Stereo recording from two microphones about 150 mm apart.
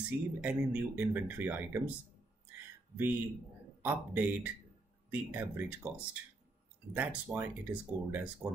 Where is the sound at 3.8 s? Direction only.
10° right (ahead or behind).